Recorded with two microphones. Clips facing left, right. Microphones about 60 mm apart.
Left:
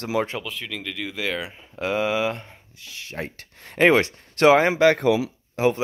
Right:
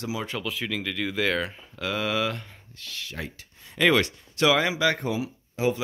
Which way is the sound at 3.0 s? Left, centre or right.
Left.